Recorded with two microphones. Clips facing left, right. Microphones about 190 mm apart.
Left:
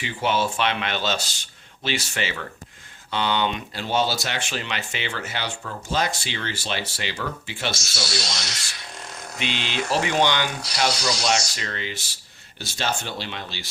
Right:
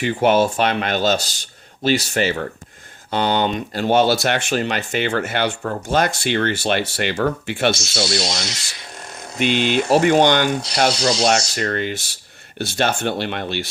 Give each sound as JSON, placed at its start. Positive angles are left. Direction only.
{"t": 0.0, "sound": "speech", "side_deg": -50}